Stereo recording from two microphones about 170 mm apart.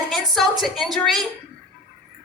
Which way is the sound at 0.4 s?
Centre (ahead or behind).